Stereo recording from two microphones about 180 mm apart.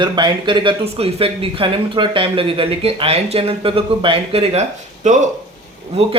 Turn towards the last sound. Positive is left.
turn(degrees=-35)  # may be behind; listen again after turning